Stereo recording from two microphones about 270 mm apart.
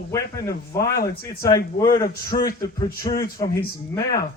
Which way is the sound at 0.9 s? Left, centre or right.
Left.